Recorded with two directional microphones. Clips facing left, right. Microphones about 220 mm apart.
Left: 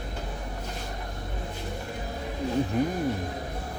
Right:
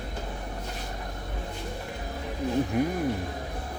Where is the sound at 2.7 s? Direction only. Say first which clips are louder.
Even; 10° right (ahead or behind).